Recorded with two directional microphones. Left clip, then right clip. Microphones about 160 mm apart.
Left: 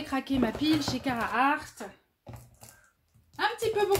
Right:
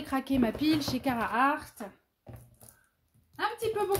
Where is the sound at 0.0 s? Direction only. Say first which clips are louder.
Even; 50° right (ahead or behind).